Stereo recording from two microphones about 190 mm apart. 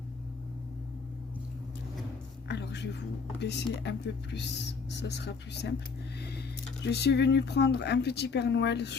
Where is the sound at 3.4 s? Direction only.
65° left (ahead or behind).